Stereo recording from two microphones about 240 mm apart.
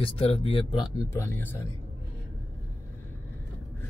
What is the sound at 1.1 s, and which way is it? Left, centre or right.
Speech, centre.